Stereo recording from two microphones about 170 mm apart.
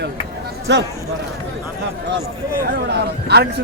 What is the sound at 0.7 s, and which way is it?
Speech, 90° right.